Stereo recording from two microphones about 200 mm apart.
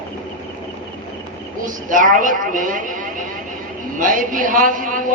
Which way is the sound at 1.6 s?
40° right (ahead or behind).